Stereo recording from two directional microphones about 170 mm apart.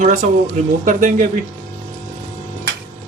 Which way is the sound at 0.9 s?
50° right (ahead or behind).